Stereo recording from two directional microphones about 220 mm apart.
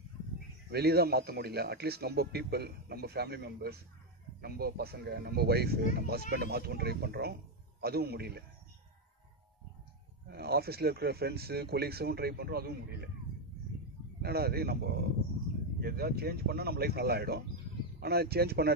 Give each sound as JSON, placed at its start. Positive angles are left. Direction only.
{"t": 0.7, "sound": "a man's voice", "side_deg": -45}
{"t": 10.2, "sound": "a man's voice", "side_deg": -45}
{"t": 14.2, "sound": "a man's voice", "side_deg": -45}